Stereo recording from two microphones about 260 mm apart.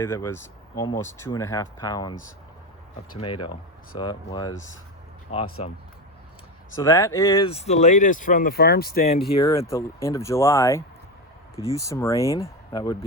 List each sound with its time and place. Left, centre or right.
0.0 s speech: centre
3.9 s speech: centre
6.7 s speech: centre; by 9.1 s left
9.4 s speech: centre